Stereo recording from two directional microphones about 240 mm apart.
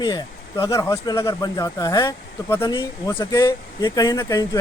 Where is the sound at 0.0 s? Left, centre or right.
Centre.